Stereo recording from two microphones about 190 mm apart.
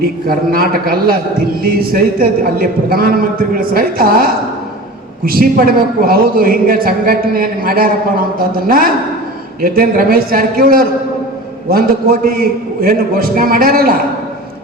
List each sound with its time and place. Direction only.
0.3 s a man's voice: 50° right (ahead or behind)